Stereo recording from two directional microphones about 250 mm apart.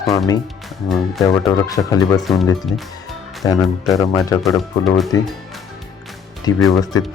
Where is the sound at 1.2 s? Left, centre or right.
Centre.